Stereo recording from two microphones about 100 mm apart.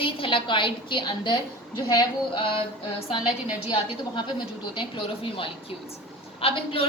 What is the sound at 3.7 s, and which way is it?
A woman's voice, 50° left (ahead or behind).